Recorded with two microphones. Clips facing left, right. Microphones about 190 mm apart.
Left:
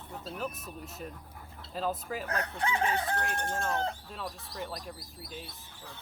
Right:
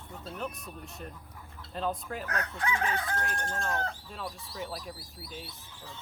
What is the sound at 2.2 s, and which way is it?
Speech, 30° left (ahead or behind).